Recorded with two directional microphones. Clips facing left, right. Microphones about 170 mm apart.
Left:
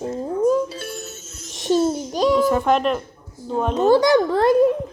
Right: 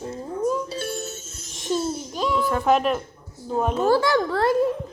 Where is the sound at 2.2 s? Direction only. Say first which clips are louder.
Left 7 dB; 35° left (ahead or behind).